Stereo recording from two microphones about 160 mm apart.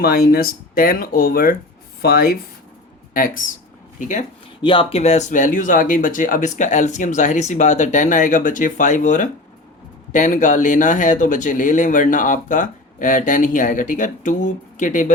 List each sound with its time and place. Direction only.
0.0 s speech: 70° left (ahead or behind); by 4.3 s 55° left (ahead or behind)
4.6 s speech: 30° left (ahead or behind); by 15.1 s 55° left (ahead or behind)